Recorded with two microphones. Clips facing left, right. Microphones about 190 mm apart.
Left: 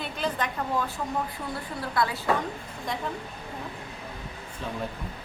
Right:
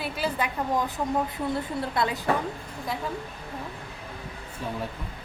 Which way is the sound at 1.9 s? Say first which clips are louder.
Left 1 dB; 20° right (ahead or behind).